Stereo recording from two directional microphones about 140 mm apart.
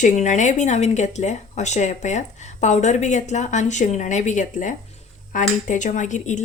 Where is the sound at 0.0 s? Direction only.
60° left (ahead or behind).